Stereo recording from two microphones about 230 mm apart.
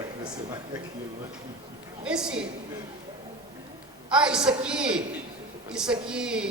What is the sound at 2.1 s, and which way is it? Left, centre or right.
Speech, centre.